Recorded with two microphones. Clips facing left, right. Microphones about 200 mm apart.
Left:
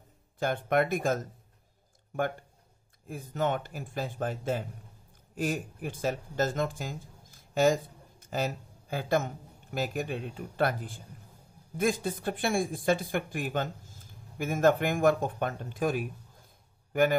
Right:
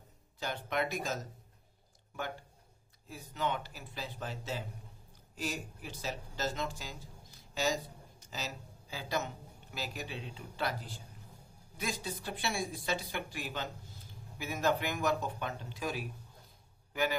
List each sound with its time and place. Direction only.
0.4 s speech: 50° left (ahead or behind)
3.1 s a man's voice: 50° left (ahead or behind)